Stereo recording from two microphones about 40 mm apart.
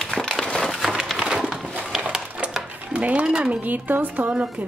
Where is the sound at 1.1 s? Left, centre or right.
Centre.